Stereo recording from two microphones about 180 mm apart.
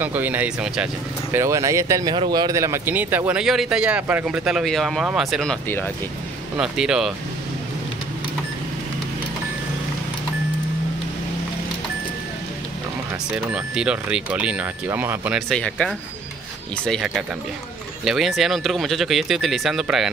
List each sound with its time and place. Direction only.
0.0 s speech: 10° right (ahead or behind); by 5.9 s 5° left (ahead or behind)
6.5 s speech: 5° right (ahead or behind)
13.5 s speech: 5° right (ahead or behind)
15.5 s speech: 5° left (ahead or behind)